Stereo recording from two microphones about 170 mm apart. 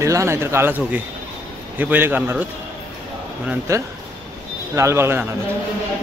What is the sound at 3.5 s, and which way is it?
Speech, 15° right (ahead or behind).